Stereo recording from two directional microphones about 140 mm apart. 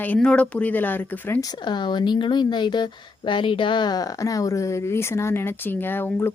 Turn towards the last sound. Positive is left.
turn(degrees=15)  # may be behind; listen again after turning